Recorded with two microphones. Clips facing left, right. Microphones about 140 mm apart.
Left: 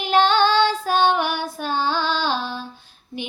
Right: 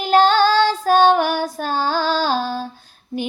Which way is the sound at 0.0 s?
40° right (ahead or behind).